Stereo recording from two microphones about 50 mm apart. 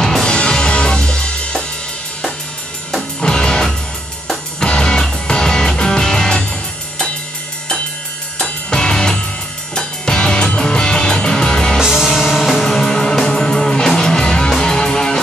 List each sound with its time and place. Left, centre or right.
0.0 s music: centre
3.2 s music: centre
8.4 s music: centre
11.8 s music: centre
12.6 s music: centre